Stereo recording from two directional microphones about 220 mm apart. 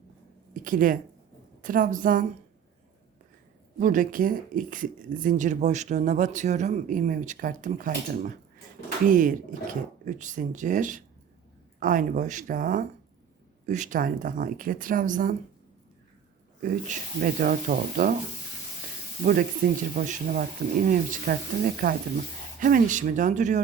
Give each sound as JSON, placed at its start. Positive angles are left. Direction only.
{"t": 0.5, "sound": "a sound", "side_deg": -40}
{"t": 1.6, "sound": "speech", "side_deg": -40}
{"t": 3.8, "sound": "speech", "side_deg": -35}
{"t": 16.6, "sound": "speech", "side_deg": -40}
{"t": 19.2, "sound": "speech", "side_deg": -40}